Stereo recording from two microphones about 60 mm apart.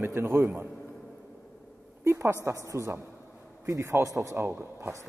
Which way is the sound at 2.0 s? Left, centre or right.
Right.